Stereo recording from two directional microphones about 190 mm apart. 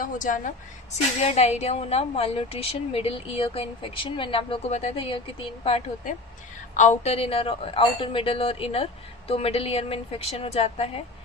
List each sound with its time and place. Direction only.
0.0 s a woman's voice: 45° left (ahead or behind)